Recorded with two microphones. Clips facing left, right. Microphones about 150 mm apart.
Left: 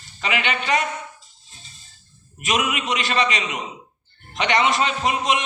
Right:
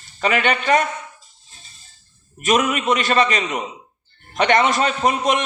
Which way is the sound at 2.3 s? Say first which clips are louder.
Right 5 dB; 45° right (ahead or behind).